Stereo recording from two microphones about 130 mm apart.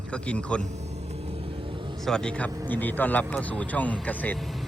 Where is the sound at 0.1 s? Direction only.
10° left (ahead or behind).